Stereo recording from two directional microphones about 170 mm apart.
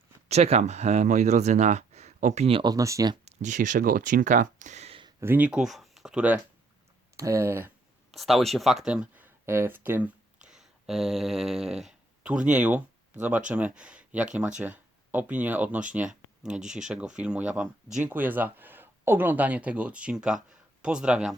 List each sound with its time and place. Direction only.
0.3 s speech: 40° right (ahead or behind); by 3.2 s 20° right (ahead or behind)
3.2 s speech: 45° right (ahead or behind)
5.2 s speech: 10° right (ahead or behind)
8.1 s speech: centre (ahead or behind)
10.4 s a sound: centre (ahead or behind)
13.5 s speech: 5° right (ahead or behind)